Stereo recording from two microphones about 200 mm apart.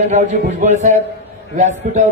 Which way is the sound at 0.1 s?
35° right (ahead or behind).